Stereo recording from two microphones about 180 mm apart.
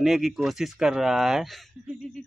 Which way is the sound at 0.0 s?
Centre (ahead or behind).